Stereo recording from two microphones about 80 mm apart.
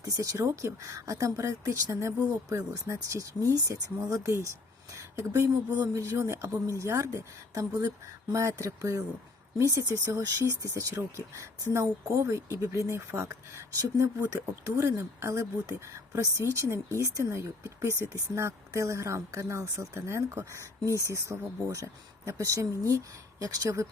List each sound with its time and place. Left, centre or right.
0.0 s speech: right
12.0 s speech: right
14.0 s speech: right